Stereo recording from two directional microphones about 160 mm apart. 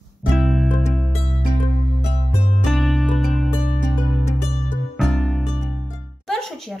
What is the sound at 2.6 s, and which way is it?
Music, centre (ahead or behind).